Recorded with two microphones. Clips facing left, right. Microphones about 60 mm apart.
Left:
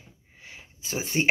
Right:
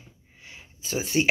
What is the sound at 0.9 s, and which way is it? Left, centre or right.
Speech, left.